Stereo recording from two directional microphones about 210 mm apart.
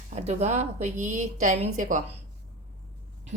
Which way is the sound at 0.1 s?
30° right (ahead or behind).